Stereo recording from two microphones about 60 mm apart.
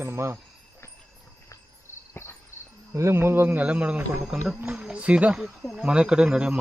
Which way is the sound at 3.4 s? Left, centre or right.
Right.